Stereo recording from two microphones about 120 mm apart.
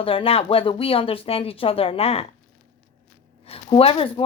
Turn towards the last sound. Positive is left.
turn(degrees=50)  # may be behind; listen again after turning